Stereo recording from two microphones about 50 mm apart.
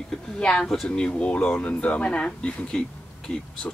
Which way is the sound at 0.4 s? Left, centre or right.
Centre.